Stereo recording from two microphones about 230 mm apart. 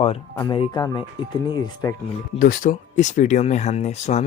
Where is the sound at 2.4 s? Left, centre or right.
Left.